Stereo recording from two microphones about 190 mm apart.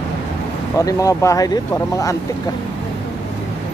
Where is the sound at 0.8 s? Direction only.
20° left (ahead or behind).